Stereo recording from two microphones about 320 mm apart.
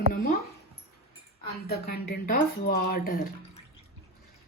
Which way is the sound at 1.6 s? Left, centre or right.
Left.